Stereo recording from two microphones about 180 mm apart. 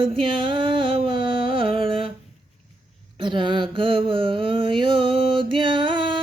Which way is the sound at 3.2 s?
25° right (ahead or behind).